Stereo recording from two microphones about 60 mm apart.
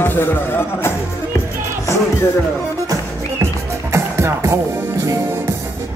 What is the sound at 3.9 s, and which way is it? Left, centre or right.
Music, right.